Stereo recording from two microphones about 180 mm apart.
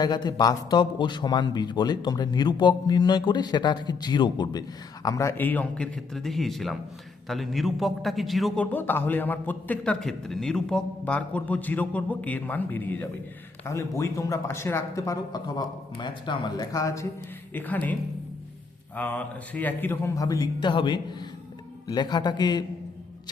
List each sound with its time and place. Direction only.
0.0 s a man's voice: 20° left (ahead or behind); by 8.6 s centre (ahead or behind)
8.7 s a man's voice: 10° left (ahead or behind)
18.9 s a man's voice: 10° left (ahead or behind)